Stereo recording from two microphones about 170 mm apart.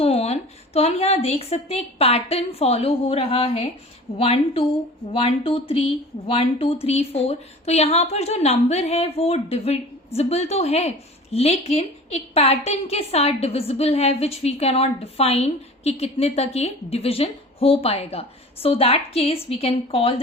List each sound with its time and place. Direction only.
0.0 s speech: 35° left (ahead or behind)